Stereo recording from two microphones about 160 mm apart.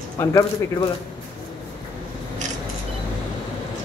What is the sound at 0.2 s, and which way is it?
Speech, 20° left (ahead or behind).